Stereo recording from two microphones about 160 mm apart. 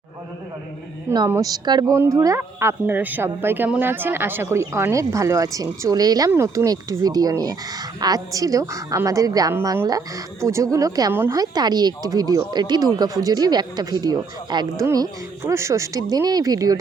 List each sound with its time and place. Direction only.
1.3 s speech: 20° right (ahead or behind)